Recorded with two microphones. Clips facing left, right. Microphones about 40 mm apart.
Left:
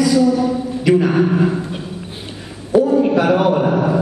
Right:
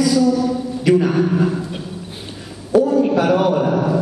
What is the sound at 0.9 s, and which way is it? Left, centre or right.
Speech, centre.